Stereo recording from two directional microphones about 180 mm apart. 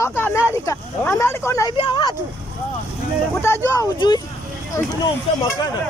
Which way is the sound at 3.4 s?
15° left (ahead or behind).